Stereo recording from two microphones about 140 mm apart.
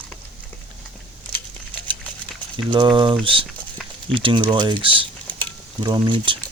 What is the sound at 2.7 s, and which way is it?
Speech, 35° right (ahead or behind).